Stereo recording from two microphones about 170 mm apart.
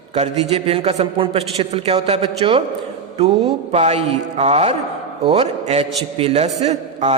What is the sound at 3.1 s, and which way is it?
Mantra, 35° right (ahead or behind).